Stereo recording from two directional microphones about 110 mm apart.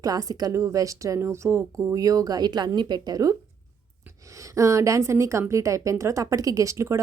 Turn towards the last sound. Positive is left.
turn(degrees=-25)  # may be behind; listen again after turning